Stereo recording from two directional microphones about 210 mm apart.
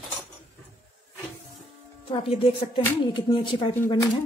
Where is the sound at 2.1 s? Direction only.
25° left (ahead or behind).